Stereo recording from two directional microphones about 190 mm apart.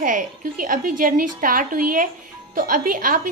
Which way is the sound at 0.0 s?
45° right (ahead or behind).